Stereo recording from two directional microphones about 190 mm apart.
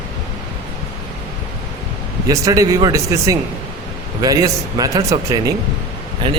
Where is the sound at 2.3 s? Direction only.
20° right (ahead or behind).